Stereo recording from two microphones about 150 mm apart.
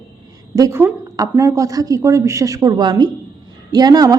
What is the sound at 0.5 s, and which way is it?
A woman's voice, 20° right (ahead or behind).